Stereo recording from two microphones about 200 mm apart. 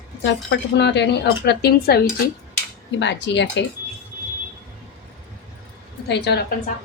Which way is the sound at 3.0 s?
60° left (ahead or behind).